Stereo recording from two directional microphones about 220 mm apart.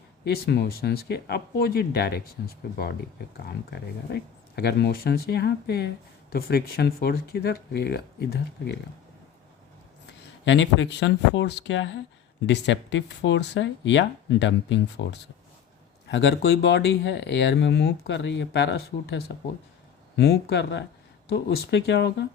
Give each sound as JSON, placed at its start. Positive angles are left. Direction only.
{"t": 0.3, "sound": "speech", "side_deg": 45}
{"t": 3.4, "sound": "speech", "side_deg": 45}
{"t": 10.4, "sound": "speech", "side_deg": 55}